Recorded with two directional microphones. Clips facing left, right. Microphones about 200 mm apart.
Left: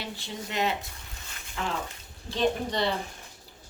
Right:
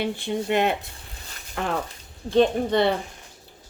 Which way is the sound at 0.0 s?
55° right (ahead or behind).